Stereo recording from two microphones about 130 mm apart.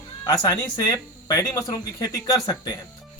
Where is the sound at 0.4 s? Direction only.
25° left (ahead or behind).